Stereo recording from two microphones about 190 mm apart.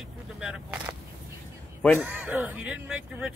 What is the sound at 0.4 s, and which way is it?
Speech, 5° right (ahead or behind).